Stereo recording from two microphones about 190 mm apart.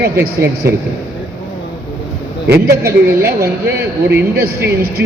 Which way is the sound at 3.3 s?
15° right (ahead or behind).